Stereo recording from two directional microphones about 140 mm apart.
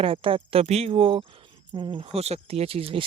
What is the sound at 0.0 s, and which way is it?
Speech, 40° right (ahead or behind).